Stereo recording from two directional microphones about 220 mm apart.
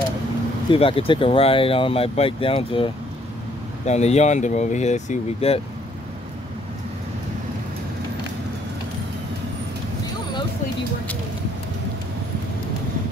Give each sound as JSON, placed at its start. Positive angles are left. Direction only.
{"t": 0.7, "sound": "speech", "side_deg": 25}